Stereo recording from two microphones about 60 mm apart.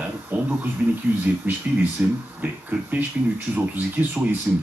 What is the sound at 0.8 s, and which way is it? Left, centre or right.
Speech, right.